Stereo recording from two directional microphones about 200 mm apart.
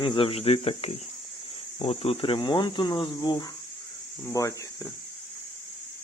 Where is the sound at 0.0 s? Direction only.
25° left (ahead or behind).